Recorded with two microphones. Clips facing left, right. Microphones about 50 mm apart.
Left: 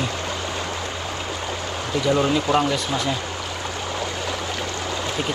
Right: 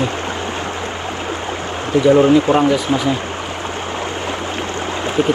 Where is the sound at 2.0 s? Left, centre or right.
Right.